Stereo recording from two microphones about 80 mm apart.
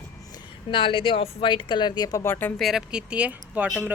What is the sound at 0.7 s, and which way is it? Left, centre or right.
Speech, left.